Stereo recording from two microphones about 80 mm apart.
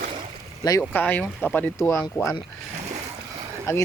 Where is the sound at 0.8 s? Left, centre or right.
Left.